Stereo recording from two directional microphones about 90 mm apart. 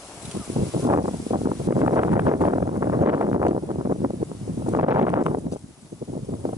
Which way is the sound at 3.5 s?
60° right (ahead or behind).